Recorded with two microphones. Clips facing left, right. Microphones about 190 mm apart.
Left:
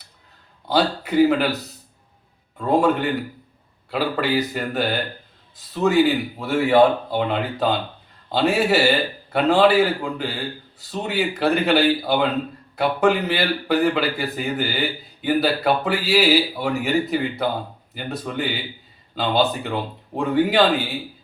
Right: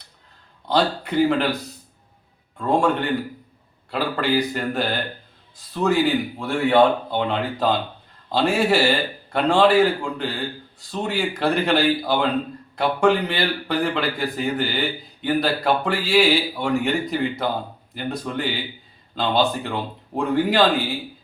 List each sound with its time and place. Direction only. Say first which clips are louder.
0.7 s a man's voice: left 1 dB; 5° left (ahead or behind)
2.6 s a man's voice: left 2 dB; 5° left (ahead or behind)